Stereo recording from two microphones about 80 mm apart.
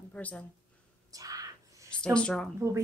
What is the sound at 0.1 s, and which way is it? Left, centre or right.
Speech, centre.